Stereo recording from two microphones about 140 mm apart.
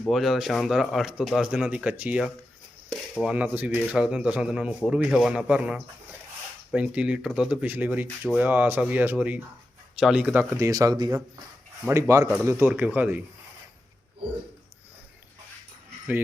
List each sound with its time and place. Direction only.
0.1 s speech: centre (ahead or behind)
3.3 s speech: 10° right (ahead or behind)
10.6 s speech: 25° right (ahead or behind)